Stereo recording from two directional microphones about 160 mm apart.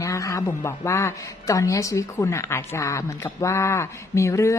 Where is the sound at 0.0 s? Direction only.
20° left (ahead or behind).